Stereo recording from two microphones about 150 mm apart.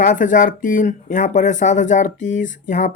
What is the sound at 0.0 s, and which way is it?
Speech, 60° left (ahead or behind).